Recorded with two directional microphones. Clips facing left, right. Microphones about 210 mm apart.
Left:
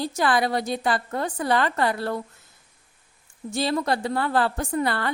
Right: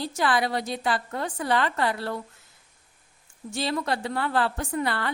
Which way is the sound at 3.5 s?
40° left (ahead or behind).